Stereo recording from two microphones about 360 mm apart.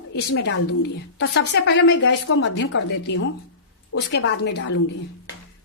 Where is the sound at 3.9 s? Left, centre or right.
Left.